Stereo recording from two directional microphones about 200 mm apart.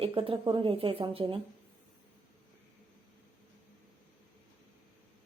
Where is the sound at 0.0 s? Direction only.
25° right (ahead or behind).